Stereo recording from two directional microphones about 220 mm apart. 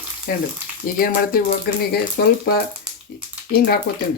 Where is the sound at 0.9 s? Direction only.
40° left (ahead or behind).